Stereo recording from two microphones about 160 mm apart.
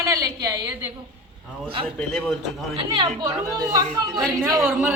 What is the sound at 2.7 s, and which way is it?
A woman's voice, 35° right (ahead or behind).